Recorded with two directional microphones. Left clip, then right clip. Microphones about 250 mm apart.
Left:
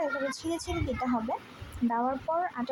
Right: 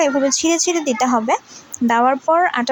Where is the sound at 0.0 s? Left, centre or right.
Right.